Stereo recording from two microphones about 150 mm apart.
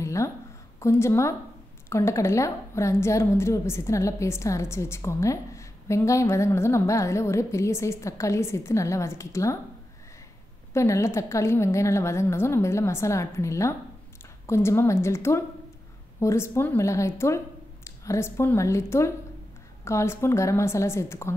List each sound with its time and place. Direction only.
0.0 s a sound: 20° left (ahead or behind)
0.7 s a woman's voice: 20° left (ahead or behind)
10.7 s a woman's voice: 20° left (ahead or behind)